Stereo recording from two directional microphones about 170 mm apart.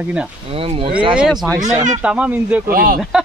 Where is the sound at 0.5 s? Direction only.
35° right (ahead or behind).